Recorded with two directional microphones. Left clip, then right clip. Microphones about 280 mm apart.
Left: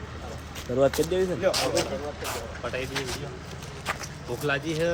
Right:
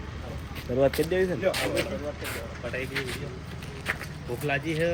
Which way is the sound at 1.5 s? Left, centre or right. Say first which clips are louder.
Left 2 dB; left.